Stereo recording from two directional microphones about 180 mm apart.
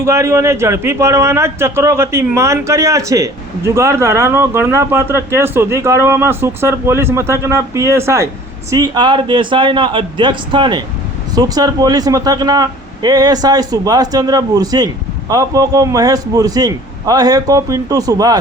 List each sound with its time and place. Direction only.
0.0 s a man's voice: 15° right (ahead or behind)